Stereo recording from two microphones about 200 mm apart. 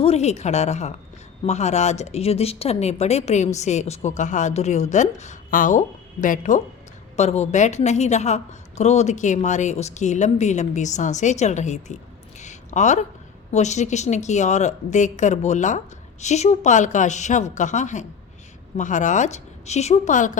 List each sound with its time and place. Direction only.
0.0 s speech: 30° left (ahead or behind)
12.4 s a sound: 35° left (ahead or behind)
13.5 s speech: 35° left (ahead or behind)